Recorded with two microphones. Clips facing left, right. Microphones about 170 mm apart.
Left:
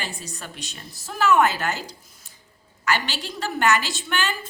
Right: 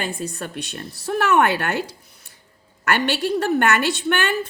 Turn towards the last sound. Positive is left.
turn(degrees=-60)  # may be behind; listen again after turning